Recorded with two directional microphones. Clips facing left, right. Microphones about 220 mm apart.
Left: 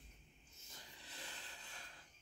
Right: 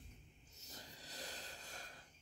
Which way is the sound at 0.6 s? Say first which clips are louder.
Right 5 dB; 40° right (ahead or behind).